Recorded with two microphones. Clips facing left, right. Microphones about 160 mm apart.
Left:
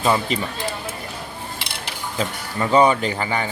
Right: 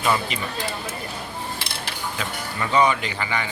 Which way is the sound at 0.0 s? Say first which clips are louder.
Left 3 dB; 30° left (ahead or behind).